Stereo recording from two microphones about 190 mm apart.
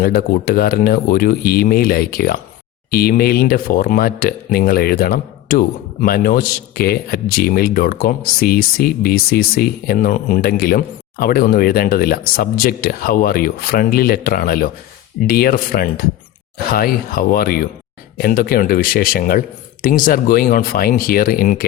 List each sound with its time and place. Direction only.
0.0 s speech: 50° left (ahead or behind)